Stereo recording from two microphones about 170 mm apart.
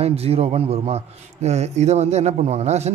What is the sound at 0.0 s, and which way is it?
A man's voice, 35° right (ahead or behind).